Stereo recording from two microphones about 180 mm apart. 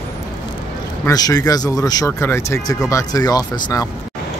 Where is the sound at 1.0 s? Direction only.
20° left (ahead or behind).